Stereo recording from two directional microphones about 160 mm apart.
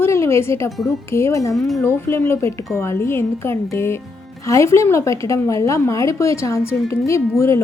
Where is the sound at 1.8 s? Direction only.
15° left (ahead or behind).